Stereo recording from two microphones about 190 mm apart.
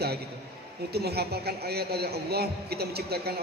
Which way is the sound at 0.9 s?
55° right (ahead or behind).